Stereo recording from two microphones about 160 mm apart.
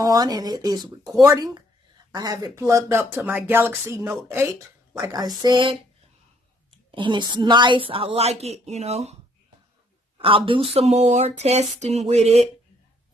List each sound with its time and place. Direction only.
0.0 s a woman's voice: 25° right (ahead or behind); by 9.1 s 40° right (ahead or behind)
10.2 s a woman's voice: 35° right (ahead or behind)